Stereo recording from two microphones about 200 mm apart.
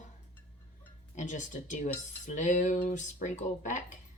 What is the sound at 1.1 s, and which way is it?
Speech, 40° left (ahead or behind).